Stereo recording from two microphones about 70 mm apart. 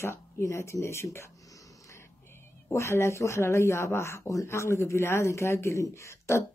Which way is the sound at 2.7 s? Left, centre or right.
Left.